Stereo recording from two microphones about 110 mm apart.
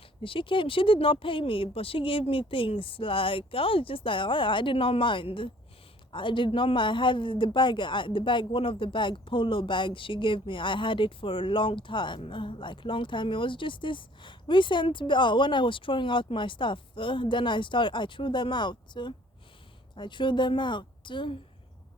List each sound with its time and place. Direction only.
0.2 s speech: 50° left (ahead or behind)